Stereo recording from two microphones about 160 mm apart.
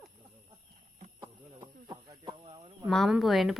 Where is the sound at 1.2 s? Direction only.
30° right (ahead or behind).